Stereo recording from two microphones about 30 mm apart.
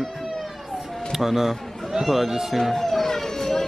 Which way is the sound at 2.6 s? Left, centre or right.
Centre.